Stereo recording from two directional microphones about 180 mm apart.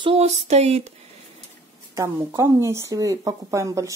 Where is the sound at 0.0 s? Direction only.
35° right (ahead or behind).